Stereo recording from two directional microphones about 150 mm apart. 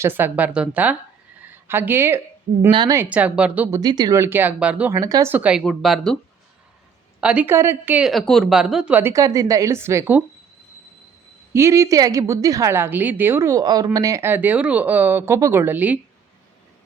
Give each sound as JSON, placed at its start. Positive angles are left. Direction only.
{"t": 0.0, "sound": "a woman's voice", "side_deg": -15}
{"t": 2.6, "sound": "speech", "side_deg": -30}
{"t": 2.9, "sound": "a woman's voice", "side_deg": -15}
{"t": 3.7, "sound": "a woman's voice", "side_deg": -25}
{"t": 4.9, "sound": "speech", "side_deg": -25}
{"t": 5.3, "sound": "a woman's voice", "side_deg": -10}
{"t": 7.2, "sound": "a woman's voice", "side_deg": -10}
{"t": 8.0, "sound": "a woman's voice", "side_deg": 0}
{"t": 11.5, "sound": "a woman's voice", "side_deg": -20}